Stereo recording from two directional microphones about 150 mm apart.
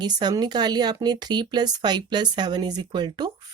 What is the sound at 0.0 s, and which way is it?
Speech, 30° right (ahead or behind).